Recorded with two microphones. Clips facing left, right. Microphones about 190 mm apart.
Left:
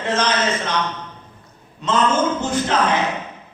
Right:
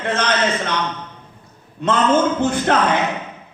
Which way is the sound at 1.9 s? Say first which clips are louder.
Right 2 dB; 55° right (ahead or behind).